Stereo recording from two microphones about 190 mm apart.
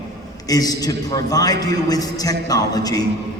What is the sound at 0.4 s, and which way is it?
A man's voice, 20° left (ahead or behind).